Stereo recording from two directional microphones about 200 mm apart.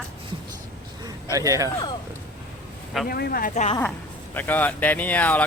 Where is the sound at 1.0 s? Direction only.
15° right (ahead or behind).